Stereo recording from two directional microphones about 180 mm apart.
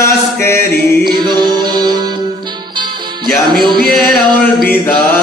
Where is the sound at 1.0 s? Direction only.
25° right (ahead or behind).